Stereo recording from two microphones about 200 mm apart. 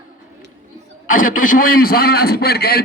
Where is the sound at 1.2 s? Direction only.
45° left (ahead or behind).